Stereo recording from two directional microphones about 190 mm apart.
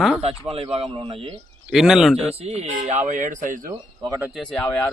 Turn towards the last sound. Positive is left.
turn(degrees=5)  # may be behind; listen again after turning